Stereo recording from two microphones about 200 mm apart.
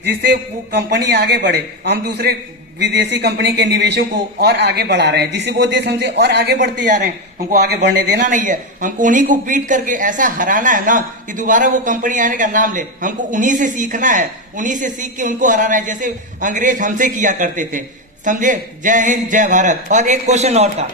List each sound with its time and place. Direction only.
0.2 s a man's voice: 55° right (ahead or behind)
8.3 s a woman's voice: 40° right (ahead or behind)